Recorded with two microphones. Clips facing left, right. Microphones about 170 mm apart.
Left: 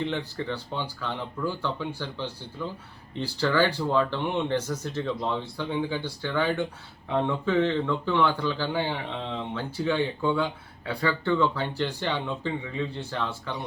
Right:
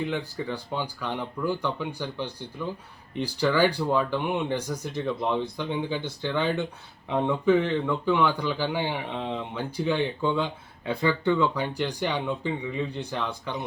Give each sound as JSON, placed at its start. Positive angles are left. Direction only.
{"t": 0.0, "sound": "a man's voice", "side_deg": -10}